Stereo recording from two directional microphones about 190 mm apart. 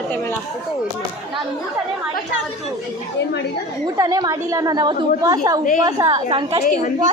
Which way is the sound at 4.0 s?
20° right (ahead or behind).